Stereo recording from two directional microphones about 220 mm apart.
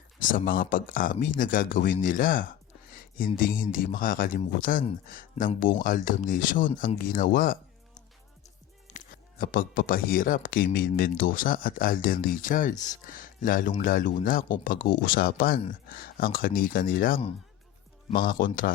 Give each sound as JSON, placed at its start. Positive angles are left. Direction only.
{"t": 0.2, "sound": "speech", "side_deg": 40}
{"t": 8.9, "sound": "music", "side_deg": 35}
{"t": 9.4, "sound": "speech", "side_deg": 40}